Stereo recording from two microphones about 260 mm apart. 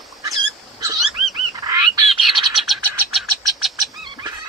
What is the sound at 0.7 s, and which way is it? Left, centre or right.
Wild animals, centre.